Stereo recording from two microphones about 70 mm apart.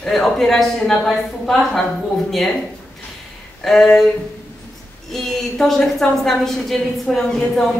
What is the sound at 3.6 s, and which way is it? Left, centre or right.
Speech, centre.